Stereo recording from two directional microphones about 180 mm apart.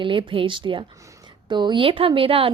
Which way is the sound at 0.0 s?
30° right (ahead or behind).